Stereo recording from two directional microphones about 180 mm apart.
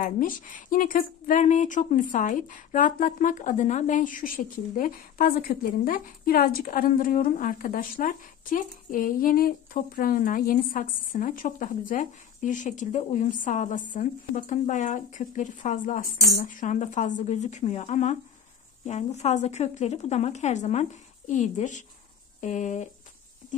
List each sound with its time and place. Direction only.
0.0 s a woman's voice: 50° left (ahead or behind)